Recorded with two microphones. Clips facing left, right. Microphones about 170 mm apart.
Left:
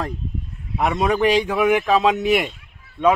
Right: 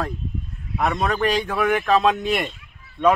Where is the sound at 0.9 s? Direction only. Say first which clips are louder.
Left 6 dB; 10° left (ahead or behind).